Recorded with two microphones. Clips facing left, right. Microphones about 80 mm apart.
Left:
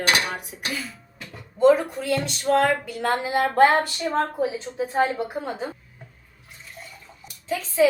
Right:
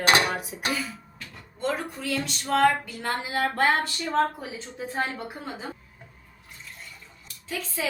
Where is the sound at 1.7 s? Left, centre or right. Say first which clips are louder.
Left 10 dB; centre.